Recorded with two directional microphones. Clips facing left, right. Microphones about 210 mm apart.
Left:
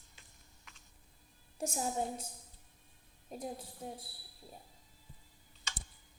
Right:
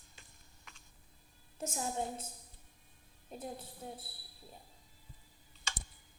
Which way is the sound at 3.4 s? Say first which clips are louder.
Left 2 dB; 10° left (ahead or behind).